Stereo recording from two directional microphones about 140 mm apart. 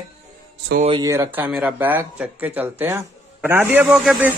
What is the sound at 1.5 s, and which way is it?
Speech, 5° right (ahead or behind).